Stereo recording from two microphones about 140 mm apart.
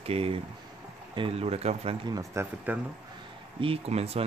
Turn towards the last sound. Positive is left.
turn(degrees=-45)  # may be behind; listen again after turning